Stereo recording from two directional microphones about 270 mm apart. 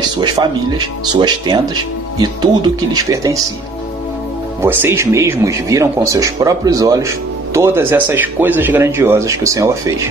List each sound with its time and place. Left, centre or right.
0.2 s speech: centre
4.6 s speech: centre